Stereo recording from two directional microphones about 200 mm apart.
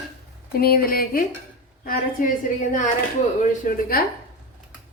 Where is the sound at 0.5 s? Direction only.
50° left (ahead or behind).